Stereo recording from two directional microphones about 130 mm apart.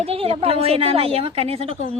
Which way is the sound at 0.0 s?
50° right (ahead or behind).